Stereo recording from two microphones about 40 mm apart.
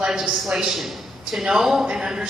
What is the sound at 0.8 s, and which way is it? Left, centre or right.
A man's voice, centre.